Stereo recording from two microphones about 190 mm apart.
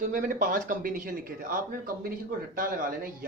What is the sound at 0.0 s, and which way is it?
Speech, 45° right (ahead or behind).